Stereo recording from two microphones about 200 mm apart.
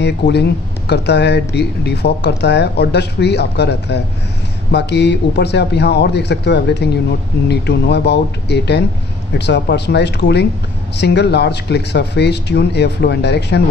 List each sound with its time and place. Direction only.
0.0 s speech: 55° left (ahead or behind)